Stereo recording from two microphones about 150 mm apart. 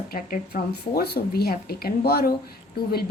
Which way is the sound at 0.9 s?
90° left.